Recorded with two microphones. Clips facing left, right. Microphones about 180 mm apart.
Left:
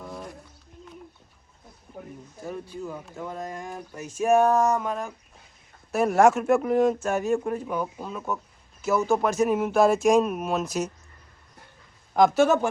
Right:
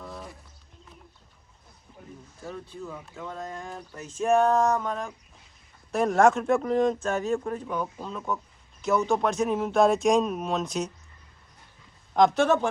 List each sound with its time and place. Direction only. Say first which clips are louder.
0.0 s a sound: left 2 dB; centre (ahead or behind)
2.5 s speech: left 3 dB; 15° left (ahead or behind)
12.1 s speech: left 2 dB; 5° left (ahead or behind)